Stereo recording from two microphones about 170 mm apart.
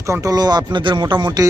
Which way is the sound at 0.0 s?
20° right (ahead or behind).